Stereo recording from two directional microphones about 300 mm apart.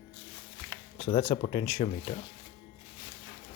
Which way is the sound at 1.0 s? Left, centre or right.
Centre.